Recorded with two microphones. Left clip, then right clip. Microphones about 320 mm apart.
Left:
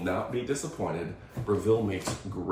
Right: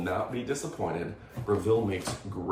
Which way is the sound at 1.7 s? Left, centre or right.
Centre.